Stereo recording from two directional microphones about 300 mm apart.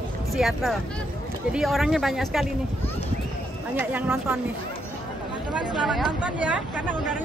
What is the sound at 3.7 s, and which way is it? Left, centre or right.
Speech, centre.